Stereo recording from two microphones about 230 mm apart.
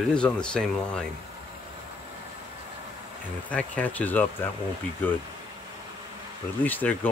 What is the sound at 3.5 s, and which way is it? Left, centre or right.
Speech, centre.